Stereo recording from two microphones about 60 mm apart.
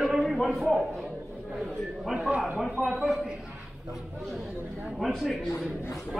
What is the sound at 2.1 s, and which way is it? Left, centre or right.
Speech, centre.